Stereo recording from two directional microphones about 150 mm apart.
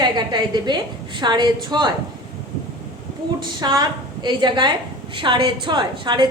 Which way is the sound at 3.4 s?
30° right (ahead or behind).